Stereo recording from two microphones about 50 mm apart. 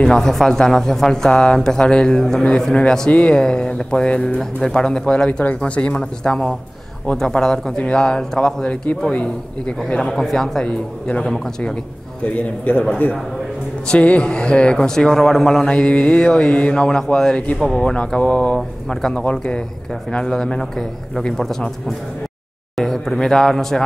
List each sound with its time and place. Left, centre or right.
0.0 s a man's voice: centre
9.9 s a man's voice: centre
12.3 s a man's voice: left
13.8 s a man's voice: left
16.8 s a man's voice: centre
18.9 s a man's voice: centre